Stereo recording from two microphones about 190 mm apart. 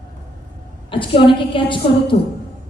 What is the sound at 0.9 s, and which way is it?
A woman's voice, 25° left (ahead or behind).